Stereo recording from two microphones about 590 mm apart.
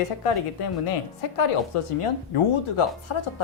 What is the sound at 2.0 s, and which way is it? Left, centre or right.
A woman's voice, left.